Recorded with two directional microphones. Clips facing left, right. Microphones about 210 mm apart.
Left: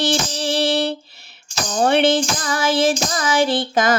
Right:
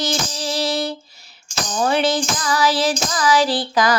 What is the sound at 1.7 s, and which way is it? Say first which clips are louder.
Speech: left 3 dB; 35° left (ahead or behind).